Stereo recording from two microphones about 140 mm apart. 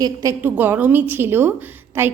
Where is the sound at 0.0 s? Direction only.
25° right (ahead or behind).